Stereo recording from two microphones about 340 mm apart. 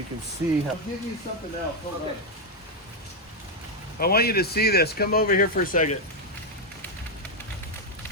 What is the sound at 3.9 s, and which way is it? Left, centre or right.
Speech, left.